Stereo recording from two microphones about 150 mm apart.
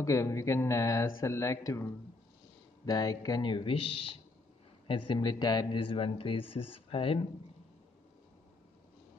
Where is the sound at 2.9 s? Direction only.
25° left (ahead or behind).